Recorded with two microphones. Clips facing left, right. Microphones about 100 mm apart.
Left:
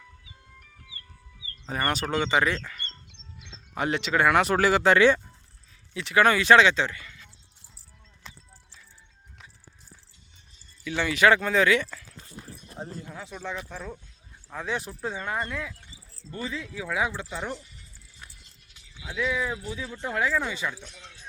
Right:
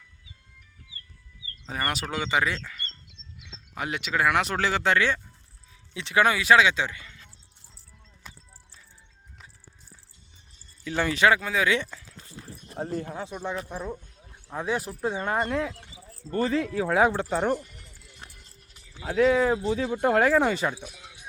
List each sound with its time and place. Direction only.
1.6 s speech: centre (ahead or behind)
5.9 s speech: 20° right (ahead or behind)
6.2 s speech: 5° right (ahead or behind)
7.0 s a sound: 30° right (ahead or behind)
10.8 s speech: 35° right (ahead or behind)
11.3 s speech: 5° right (ahead or behind)
11.9 s speech: 20° right (ahead or behind)
12.8 s speech: 55° right (ahead or behind)
13.1 s speech: 15° right (ahead or behind)
15.4 s speech: 30° right (ahead or behind)
16.3 s speech: 55° right (ahead or behind)
18.4 s a sound: 40° right (ahead or behind)
19.7 s speech: 60° right (ahead or behind)
20.7 s music: 10° right (ahead or behind)